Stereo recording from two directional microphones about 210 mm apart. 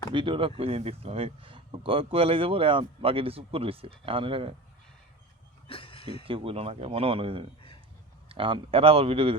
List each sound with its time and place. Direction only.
0.1 s speech: 25° right (ahead or behind)
5.6 s a sound: 25° left (ahead or behind)
6.2 s speech: 25° right (ahead or behind)